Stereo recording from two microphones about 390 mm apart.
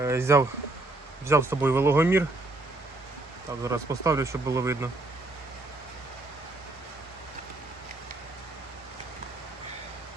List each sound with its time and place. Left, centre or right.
0.0 s speech: centre
3.6 s speech: centre